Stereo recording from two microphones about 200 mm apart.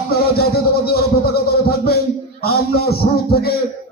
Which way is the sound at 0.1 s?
50° left (ahead or behind).